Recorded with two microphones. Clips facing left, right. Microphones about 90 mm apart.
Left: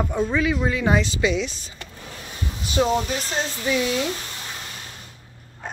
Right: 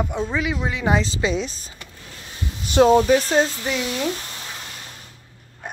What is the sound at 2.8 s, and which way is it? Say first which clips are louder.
Speech: right 8 dB; 55° right (ahead or behind).